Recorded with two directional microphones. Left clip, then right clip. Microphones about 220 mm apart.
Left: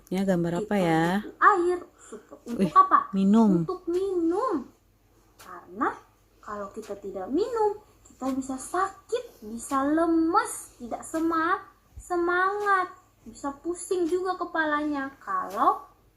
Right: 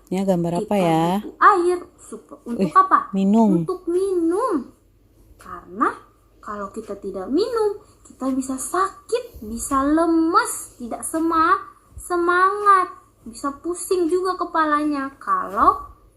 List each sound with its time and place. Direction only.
0.1 s speech: 10° right (ahead or behind)
1.4 s a woman's voice: 25° right (ahead or behind)
3.2 s speech: 10° right (ahead or behind)
3.7 s a woman's voice: 25° right (ahead or behind)
5.5 s a sound: 25° right (ahead or behind)
6.4 s a woman's voice: 25° right (ahead or behind)